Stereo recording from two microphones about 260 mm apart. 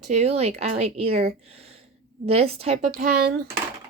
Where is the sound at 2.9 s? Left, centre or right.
Right.